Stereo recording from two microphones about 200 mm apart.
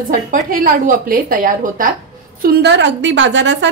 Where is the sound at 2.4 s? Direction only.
55° right (ahead or behind).